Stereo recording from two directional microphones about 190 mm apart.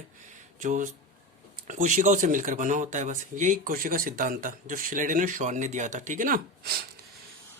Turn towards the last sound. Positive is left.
turn(degrees=-50)  # may be behind; listen again after turning